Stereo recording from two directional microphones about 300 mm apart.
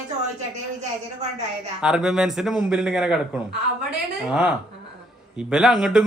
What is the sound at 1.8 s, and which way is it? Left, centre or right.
A man's voice, centre.